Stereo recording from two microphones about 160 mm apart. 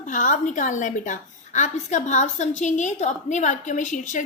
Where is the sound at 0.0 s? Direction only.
55° left (ahead or behind).